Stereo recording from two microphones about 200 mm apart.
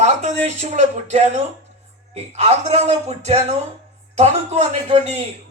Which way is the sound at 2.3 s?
35° right (ahead or behind).